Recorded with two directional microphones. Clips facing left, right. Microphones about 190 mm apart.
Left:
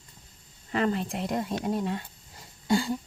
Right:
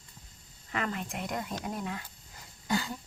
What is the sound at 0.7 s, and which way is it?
Speech, 30° left (ahead or behind).